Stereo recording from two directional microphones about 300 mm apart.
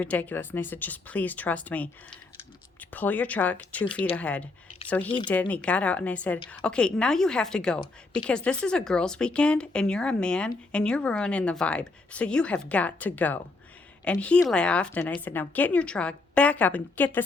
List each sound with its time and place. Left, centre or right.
0.0 s a woman's voice: centre
2.9 s a woman's voice: centre
5.0 s speech: centre
5.3 s a woman's voice: centre